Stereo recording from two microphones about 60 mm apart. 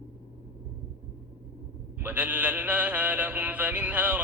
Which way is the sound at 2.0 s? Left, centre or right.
Right.